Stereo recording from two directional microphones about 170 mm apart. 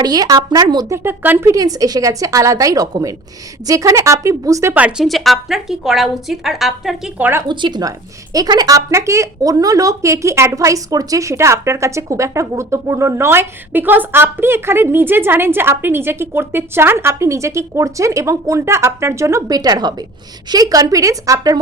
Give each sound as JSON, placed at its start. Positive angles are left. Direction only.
{"t": 0.0, "sound": "a woman's voice", "side_deg": -20}
{"t": 7.4, "sound": "a woman's voice", "side_deg": -25}